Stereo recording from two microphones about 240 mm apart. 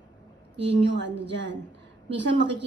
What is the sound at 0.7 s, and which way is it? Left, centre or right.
A woman's voice, right.